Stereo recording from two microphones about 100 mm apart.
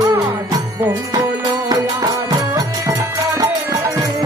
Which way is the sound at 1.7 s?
40° right (ahead or behind).